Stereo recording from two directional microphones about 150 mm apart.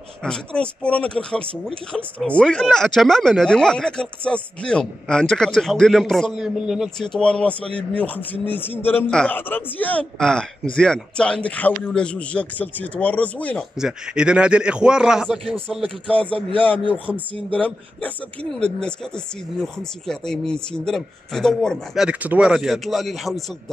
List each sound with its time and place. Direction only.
0.2 s a man's voice: 5° left (ahead or behind)
13.7 s a man's voice: 5° right (ahead or behind)
16.2 s a man's voice: 35° right (ahead or behind)
16.5 s a man's voice: 10° left (ahead or behind)